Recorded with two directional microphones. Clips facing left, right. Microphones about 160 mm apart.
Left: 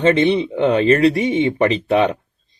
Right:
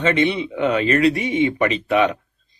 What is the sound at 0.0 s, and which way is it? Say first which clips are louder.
Speech: left 4 dB; 30° left (ahead or behind).